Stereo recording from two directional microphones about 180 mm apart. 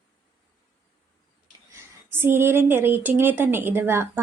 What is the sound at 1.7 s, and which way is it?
A woman's voice, 10° right (ahead or behind).